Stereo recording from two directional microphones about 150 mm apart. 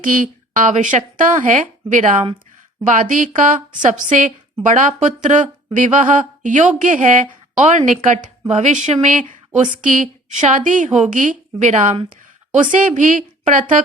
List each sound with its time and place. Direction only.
0.0 s a woman's voice: 65° right (ahead or behind)